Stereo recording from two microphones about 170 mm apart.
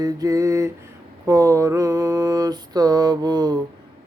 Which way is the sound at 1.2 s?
20° right (ahead or behind).